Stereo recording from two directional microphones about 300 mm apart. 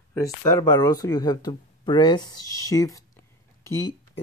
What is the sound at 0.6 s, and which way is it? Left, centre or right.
Speech, centre.